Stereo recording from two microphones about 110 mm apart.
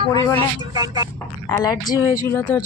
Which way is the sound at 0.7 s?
35° right (ahead or behind).